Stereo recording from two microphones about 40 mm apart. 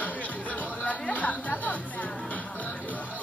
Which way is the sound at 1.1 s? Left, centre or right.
Left.